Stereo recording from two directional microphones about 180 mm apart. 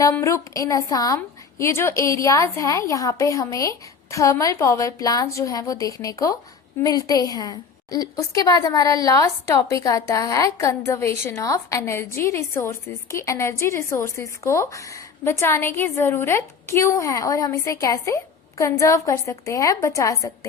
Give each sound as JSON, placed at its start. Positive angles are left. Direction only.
{"t": 0.2, "sound": "a woman's voice", "side_deg": 15}